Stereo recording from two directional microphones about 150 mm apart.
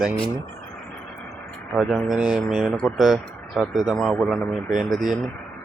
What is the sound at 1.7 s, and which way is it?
Speech, centre (ahead or behind).